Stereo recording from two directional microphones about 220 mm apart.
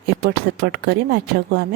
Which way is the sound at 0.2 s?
50° right (ahead or behind).